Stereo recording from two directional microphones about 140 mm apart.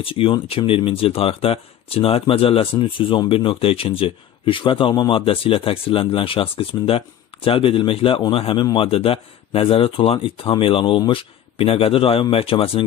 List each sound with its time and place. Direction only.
0.0 s speech: 40° left (ahead or behind)